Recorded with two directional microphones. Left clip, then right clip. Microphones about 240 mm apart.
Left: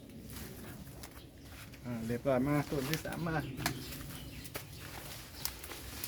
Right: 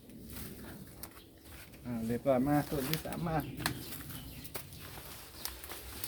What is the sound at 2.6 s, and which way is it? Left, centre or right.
Speech, right.